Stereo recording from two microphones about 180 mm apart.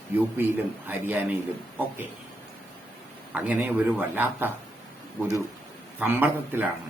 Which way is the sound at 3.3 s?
10° right (ahead or behind).